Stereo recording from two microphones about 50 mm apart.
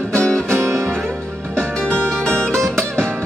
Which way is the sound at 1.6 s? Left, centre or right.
Left.